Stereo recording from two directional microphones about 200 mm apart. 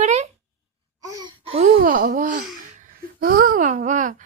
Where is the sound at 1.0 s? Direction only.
15° right (ahead or behind).